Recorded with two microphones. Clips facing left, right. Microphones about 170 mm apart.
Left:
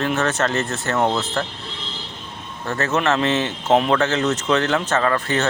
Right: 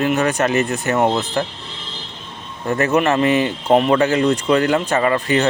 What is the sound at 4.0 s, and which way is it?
Speech, 10° right (ahead or behind).